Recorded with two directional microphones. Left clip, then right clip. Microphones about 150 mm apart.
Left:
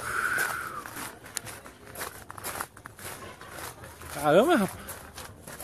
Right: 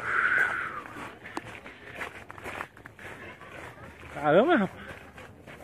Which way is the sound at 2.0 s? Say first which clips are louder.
Even; 15° left (ahead or behind).